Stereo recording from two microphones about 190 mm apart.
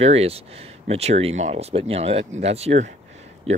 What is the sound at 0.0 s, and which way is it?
A man's voice, 35° right (ahead or behind).